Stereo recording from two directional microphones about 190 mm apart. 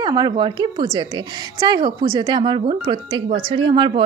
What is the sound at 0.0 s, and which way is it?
A woman's voice, 20° right (ahead or behind).